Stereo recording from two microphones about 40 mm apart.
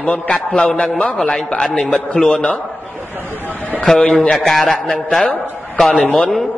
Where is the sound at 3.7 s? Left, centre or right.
Left.